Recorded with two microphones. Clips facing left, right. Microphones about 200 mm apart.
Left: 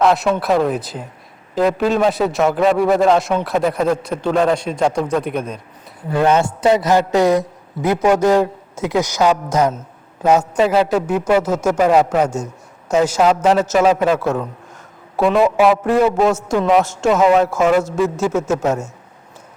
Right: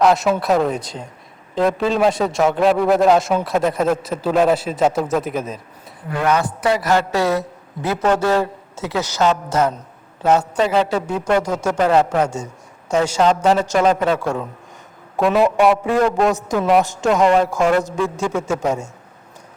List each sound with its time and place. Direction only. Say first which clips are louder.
0.0 s a man's voice: even; centre (ahead or behind)
6.1 s a man's voice: left 4 dB; 30° left (ahead or behind); by 9.4 s 10° left (ahead or behind)
10.6 s a man's voice: left 3 dB; 5° left (ahead or behind)